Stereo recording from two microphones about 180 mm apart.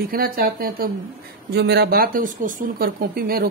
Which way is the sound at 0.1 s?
55° right (ahead or behind).